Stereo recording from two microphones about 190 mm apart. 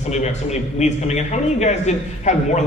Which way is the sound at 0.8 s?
35° left (ahead or behind).